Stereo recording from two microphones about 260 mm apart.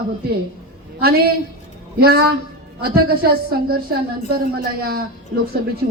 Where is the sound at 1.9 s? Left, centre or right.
Right.